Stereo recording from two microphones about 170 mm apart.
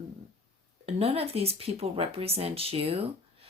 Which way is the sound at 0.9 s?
35° right (ahead or behind).